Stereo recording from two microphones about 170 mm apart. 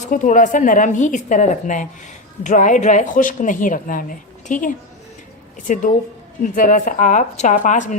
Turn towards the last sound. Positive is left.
turn(degrees=45)  # may be behind; listen again after turning